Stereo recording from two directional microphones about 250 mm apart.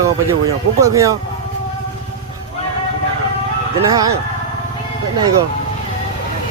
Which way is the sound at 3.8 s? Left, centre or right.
Centre.